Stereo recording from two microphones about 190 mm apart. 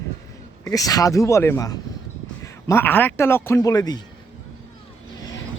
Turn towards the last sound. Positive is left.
turn(degrees=20)  # may be behind; listen again after turning